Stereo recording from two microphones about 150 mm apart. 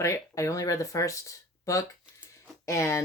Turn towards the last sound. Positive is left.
turn(degrees=20)  # may be behind; listen again after turning